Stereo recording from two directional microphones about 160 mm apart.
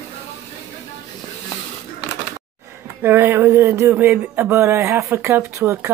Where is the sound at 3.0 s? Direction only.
15° right (ahead or behind).